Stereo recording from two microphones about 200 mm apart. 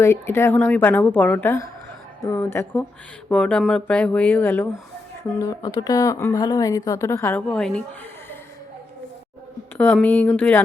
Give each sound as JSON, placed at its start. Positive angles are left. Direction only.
{"t": 0.0, "sound": "speech", "side_deg": 10}
{"t": 9.7, "sound": "speech", "side_deg": 10}